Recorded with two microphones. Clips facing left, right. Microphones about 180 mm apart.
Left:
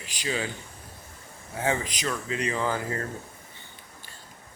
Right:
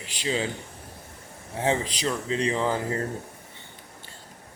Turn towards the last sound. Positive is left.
turn(degrees=-25)  # may be behind; listen again after turning